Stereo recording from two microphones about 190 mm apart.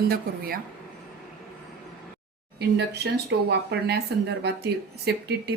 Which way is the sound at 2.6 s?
60° right (ahead or behind).